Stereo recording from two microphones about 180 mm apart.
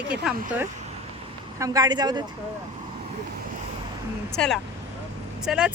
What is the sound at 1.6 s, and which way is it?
Speech, 20° right (ahead or behind).